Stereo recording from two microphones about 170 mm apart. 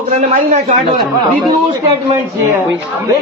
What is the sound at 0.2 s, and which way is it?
Speech, 45° right (ahead or behind).